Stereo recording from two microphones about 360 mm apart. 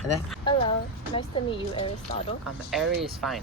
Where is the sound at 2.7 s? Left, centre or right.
Centre.